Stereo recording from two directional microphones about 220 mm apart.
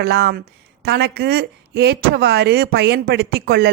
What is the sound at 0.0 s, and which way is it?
Speech, 50° right (ahead or behind).